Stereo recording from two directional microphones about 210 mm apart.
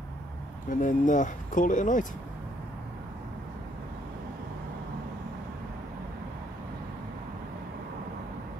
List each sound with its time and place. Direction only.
0.7 s speech: 40° left (ahead or behind)